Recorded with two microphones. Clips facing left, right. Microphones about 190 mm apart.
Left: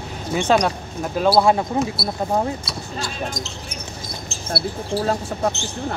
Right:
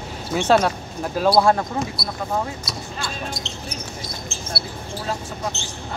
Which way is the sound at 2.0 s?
35° left (ahead or behind).